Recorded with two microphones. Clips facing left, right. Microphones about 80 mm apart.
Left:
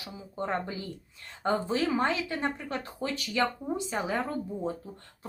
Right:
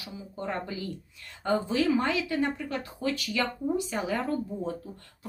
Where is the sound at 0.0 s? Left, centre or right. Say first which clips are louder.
Left 1 dB; left.